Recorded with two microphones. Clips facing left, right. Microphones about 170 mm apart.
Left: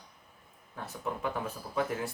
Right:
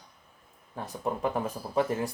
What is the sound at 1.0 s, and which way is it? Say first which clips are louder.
Speech: right 5 dB; 35° right (ahead or behind).